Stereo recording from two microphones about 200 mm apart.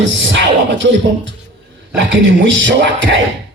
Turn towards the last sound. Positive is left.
turn(degrees=-65)  # may be behind; listen again after turning